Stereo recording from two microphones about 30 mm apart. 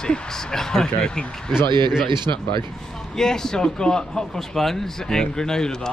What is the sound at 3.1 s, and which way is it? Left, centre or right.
Speech, centre.